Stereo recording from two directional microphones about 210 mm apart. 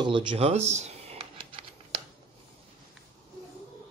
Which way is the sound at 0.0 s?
25° right (ahead or behind).